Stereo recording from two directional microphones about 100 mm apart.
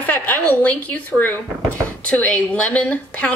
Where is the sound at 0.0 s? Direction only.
20° left (ahead or behind).